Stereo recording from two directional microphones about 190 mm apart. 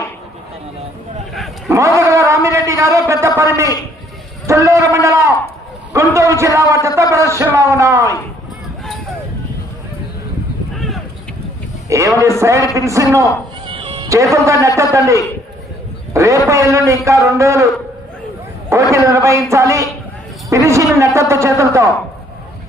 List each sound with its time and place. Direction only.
1.3 s a sound: centre (ahead or behind)
2.0 s a sound: 15° right (ahead or behind)
4.4 s speech: 15° right (ahead or behind)
11.9 s a man's voice: 15° right (ahead or behind)
13.7 s cat: 30° right (ahead or behind)
14.3 s speech: 15° right (ahead or behind)
18.7 s speech: 15° right (ahead or behind)